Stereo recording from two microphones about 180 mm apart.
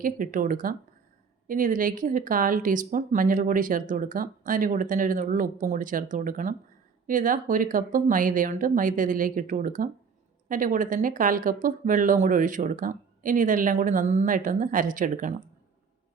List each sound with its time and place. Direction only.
0.0 s speech: 50° right (ahead or behind)